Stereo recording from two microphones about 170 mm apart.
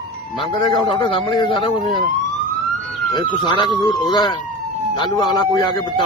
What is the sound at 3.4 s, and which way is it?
A man's voice, 25° left (ahead or behind).